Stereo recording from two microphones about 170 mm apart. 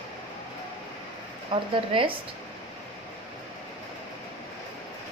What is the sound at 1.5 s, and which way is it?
Speech, 30° right (ahead or behind).